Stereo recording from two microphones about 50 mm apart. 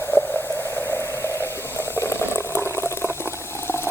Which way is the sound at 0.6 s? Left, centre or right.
Left.